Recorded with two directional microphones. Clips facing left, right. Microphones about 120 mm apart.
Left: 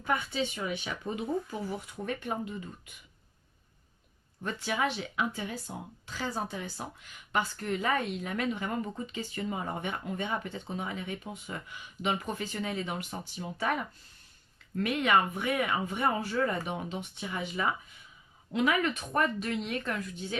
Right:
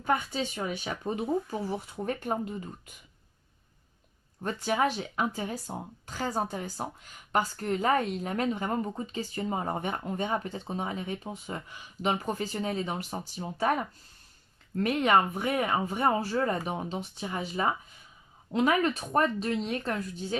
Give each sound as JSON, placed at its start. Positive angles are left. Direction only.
{"t": 0.0, "sound": "speech", "side_deg": -45}
{"t": 4.4, "sound": "speech", "side_deg": -40}
{"t": 14.8, "sound": "speech", "side_deg": -40}